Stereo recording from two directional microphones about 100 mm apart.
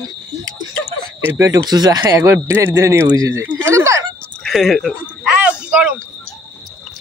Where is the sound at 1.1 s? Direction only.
25° right (ahead or behind).